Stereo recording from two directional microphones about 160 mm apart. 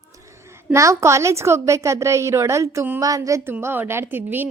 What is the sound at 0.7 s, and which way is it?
A woman's voice, 20° right (ahead or behind).